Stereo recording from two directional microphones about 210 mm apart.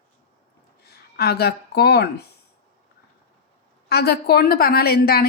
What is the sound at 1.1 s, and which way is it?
Speech, 50° left (ahead or behind).